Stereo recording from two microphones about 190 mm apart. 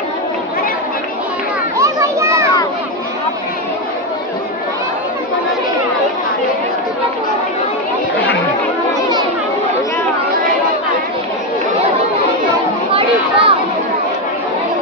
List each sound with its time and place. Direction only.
1.8 s children playing: 15° right (ahead or behind)
12.9 s children playing: 30° right (ahead or behind)